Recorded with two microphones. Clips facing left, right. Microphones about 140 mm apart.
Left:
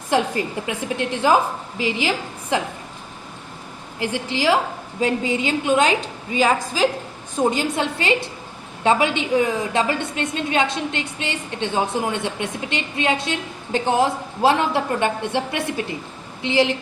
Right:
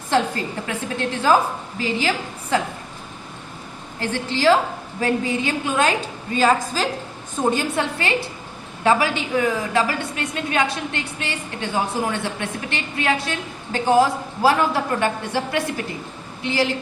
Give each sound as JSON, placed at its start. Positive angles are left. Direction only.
{"t": 0.1, "sound": "a woman's voice", "side_deg": 15}
{"t": 4.0, "sound": "a woman's voice", "side_deg": 15}